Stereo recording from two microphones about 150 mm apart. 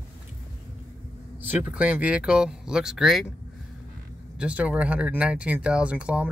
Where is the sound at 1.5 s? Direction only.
10° right (ahead or behind).